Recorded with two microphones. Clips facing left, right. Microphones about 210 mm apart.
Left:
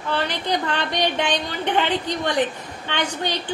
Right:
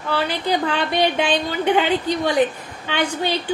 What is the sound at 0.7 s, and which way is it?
A woman's voice, 10° right (ahead or behind).